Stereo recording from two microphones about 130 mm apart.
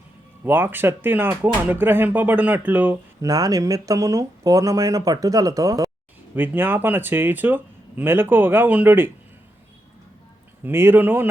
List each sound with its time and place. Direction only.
0.4 s speech: 15° right (ahead or behind)
6.3 s speech: 15° right (ahead or behind)
10.6 s speech: 20° right (ahead or behind)